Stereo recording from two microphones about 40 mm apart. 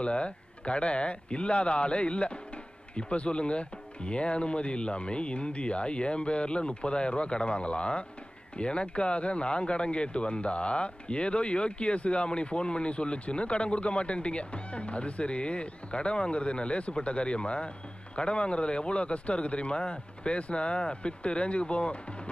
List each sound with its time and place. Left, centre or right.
0.0 s a man's voice: left